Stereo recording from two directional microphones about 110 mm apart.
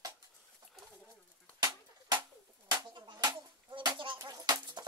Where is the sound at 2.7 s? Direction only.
45° right (ahead or behind).